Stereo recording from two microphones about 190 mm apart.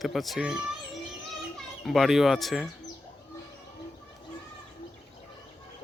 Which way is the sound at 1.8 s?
Centre (ahead or behind).